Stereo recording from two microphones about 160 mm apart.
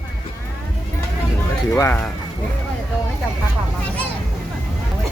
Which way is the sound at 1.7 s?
15° left (ahead or behind).